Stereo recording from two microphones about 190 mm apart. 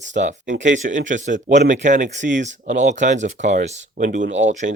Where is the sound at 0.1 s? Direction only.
40° right (ahead or behind).